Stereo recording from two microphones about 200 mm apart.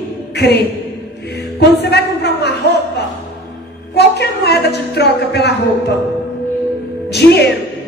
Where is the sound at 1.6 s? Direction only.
55° left (ahead or behind).